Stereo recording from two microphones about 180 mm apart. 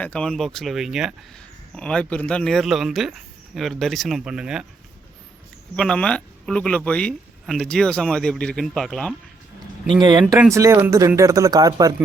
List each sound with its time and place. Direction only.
0.0 s speech: 5° left (ahead or behind)
5.7 s speech: 5° left (ahead or behind)
10.0 s speech: 25° right (ahead or behind)